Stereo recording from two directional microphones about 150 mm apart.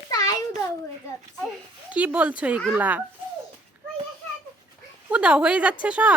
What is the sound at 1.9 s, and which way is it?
A woman's voice, 10° right (ahead or behind).